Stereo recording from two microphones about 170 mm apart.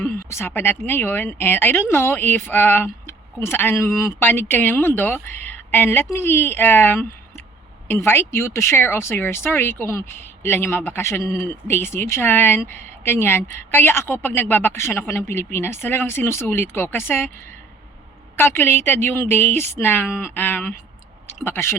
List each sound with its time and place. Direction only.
0.0 s speech: 15° left (ahead or behind)
18.3 s speech: 15° left (ahead or behind)